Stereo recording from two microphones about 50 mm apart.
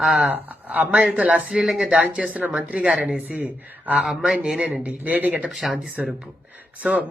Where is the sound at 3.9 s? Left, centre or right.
Centre.